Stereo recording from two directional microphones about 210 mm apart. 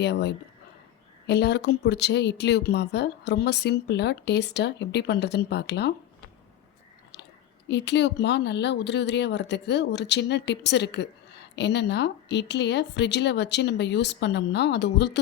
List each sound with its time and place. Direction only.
0.0 s speech: 55° left (ahead or behind)
7.7 s speech: 55° left (ahead or behind)